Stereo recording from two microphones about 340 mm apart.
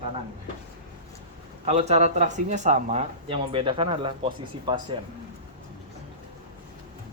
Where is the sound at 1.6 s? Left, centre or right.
Centre.